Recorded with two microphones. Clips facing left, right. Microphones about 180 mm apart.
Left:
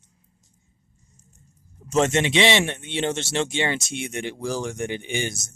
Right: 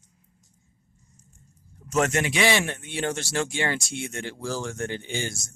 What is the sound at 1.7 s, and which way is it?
Speech, 25° left (ahead or behind).